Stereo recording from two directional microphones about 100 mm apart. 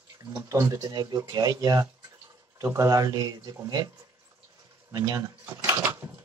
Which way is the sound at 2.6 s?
30° right (ahead or behind).